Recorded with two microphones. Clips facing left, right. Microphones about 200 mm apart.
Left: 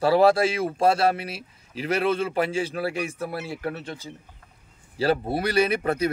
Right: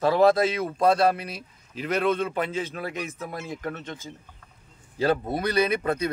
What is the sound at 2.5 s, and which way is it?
Speech, 10° left (ahead or behind).